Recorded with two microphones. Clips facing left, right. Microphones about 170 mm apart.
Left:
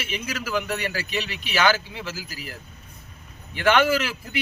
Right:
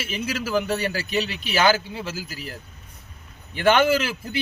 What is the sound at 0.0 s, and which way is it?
Speech, 30° right (ahead or behind).